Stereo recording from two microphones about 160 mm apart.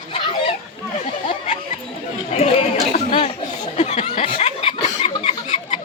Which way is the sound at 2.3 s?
40° left (ahead or behind).